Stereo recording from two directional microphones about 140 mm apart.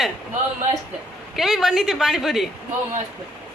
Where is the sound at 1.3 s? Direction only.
Centre (ahead or behind).